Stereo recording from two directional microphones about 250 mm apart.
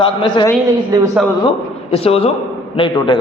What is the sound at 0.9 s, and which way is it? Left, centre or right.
Speech, centre.